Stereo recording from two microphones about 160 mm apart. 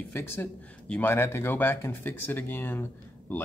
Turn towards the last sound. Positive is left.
turn(degrees=15)  # may be behind; listen again after turning